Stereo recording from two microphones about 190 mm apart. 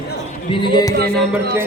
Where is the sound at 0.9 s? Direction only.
55° right (ahead or behind).